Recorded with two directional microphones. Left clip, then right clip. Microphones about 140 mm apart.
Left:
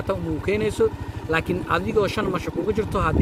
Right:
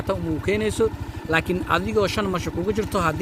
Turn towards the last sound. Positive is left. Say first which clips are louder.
# even
turn(degrees=-60)  # may be behind; listen again after turning